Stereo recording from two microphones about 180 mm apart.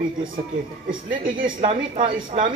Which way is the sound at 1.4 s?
30° right (ahead or behind).